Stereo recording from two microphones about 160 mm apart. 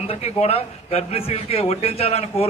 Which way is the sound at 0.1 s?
40° left (ahead or behind).